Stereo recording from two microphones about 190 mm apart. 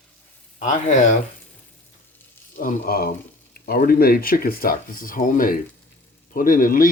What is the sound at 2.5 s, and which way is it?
Speech, 50° left (ahead or behind).